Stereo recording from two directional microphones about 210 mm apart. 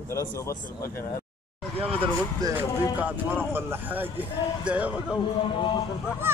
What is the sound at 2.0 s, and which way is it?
Speech, 15° right (ahead or behind).